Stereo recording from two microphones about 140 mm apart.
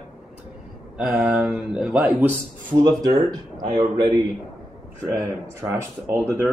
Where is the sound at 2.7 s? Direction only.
25° right (ahead or behind).